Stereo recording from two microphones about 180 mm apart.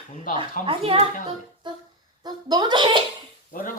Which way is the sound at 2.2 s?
25° right (ahead or behind).